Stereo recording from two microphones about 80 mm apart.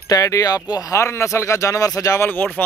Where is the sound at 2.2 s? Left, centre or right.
Left.